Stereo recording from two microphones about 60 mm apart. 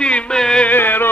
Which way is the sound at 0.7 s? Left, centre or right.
Left.